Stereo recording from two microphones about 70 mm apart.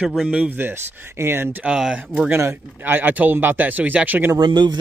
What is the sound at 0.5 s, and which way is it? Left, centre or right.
Speech, right.